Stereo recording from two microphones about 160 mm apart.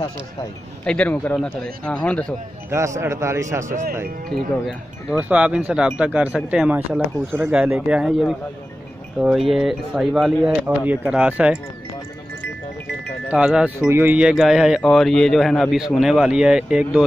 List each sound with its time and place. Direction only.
0.8 s speech: 10° left (ahead or behind)
2.7 s speech: 20° right (ahead or behind)
3.6 s speech: 50° right (ahead or behind)
5.3 s speech: 10° right (ahead or behind)
13.3 s speech: 5° right (ahead or behind)